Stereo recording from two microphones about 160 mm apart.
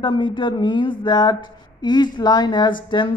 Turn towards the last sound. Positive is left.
turn(degrees=30)  # may be behind; listen again after turning